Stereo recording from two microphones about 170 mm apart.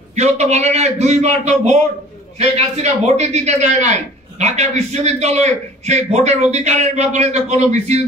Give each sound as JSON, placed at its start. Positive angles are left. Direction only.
{"t": 0.1, "sound": "a man's voice", "side_deg": -40}